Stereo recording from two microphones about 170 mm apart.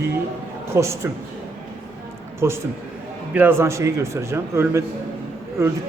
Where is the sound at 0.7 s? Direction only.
15° right (ahead or behind).